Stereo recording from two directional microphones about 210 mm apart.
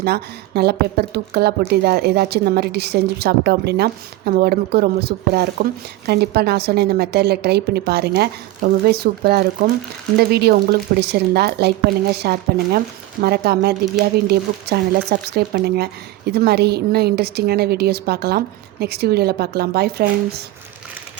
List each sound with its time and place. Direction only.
0.0 s a woman's voice: 50° right (ahead or behind)